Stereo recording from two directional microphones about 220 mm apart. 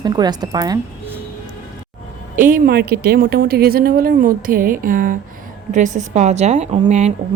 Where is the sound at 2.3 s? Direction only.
40° right (ahead or behind).